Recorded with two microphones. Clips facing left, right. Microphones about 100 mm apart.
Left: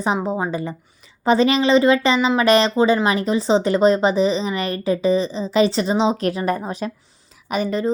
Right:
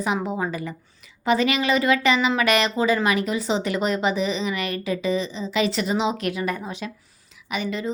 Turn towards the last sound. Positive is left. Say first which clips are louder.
# left 6 dB
turn(degrees=40)  # may be behind; listen again after turning